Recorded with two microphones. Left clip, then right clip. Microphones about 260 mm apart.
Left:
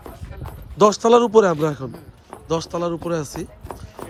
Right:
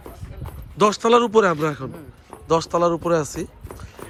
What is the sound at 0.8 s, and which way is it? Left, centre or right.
A man's voice, centre.